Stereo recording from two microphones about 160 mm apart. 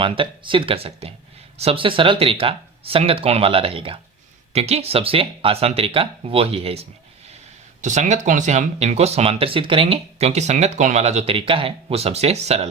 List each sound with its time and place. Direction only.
0.0 s speech: 30° right (ahead or behind)
7.8 s speech: 50° right (ahead or behind)